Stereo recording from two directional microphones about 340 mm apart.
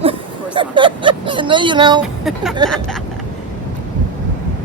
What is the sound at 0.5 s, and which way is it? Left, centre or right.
Speech, centre.